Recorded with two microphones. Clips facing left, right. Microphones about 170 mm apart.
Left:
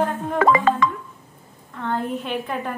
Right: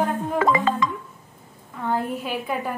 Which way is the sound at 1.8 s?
5° right (ahead or behind).